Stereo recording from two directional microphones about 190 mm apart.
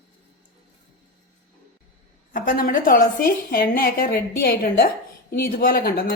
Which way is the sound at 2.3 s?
45° left (ahead or behind).